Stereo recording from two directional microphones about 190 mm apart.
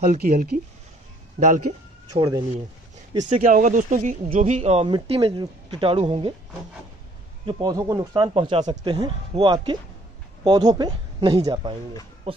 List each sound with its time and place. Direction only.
0.0 s speech: 45° right (ahead or behind)
2.1 s speech: 20° right (ahead or behind)
3.3 s speech: 45° right (ahead or behind)
7.4 s speech: 20° right (ahead or behind)
12.3 s speech: 30° right (ahead or behind)